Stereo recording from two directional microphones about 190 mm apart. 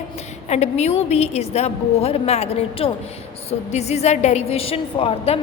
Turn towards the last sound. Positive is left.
turn(degrees=30)  # may be behind; listen again after turning